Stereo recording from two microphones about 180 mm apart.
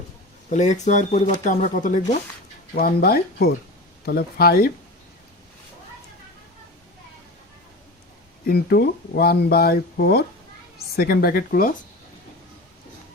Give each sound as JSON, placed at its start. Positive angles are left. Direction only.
{"t": 0.5, "sound": "speech", "side_deg": 40}
{"t": 8.4, "sound": "speech", "side_deg": 60}